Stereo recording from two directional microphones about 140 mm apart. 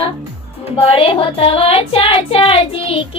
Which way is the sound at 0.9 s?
40° left (ahead or behind).